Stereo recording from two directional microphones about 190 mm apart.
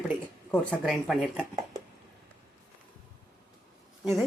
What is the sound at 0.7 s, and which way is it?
Speech, centre (ahead or behind).